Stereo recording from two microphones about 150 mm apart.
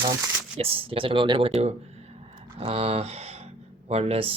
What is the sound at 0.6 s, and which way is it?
Speech, 40° right (ahead or behind).